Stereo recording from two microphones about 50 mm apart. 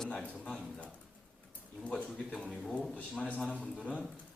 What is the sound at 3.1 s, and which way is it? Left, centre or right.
Speech, left.